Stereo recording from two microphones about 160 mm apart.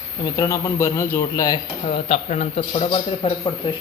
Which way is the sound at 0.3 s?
20° left (ahead or behind).